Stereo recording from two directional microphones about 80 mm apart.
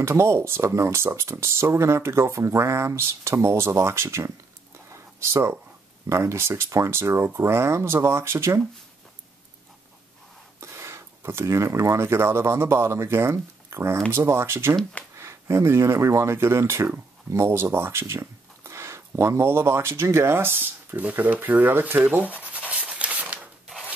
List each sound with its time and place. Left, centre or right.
0.0 s speech: right
4.8 s a sound: right
6.0 s speech: right
10.6 s speech: right
14.8 s speech: centre
15.1 s speech: right; by 23.5 s centre